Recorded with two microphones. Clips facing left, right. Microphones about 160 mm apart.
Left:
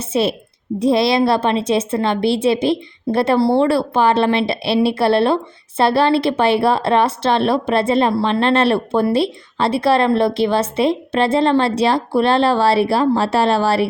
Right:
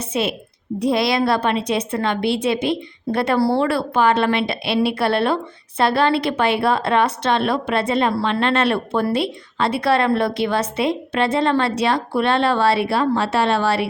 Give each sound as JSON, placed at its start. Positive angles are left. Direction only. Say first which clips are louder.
{"t": 0.0, "sound": "a woman's voice", "louder": "left 4 dB", "side_deg": 30}